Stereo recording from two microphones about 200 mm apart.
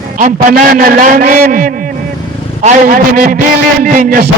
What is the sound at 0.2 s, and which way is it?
A man's voice, 40° right (ahead or behind).